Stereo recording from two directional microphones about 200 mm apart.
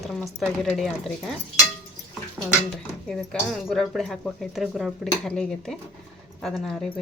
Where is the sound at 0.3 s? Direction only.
Centre (ahead or behind).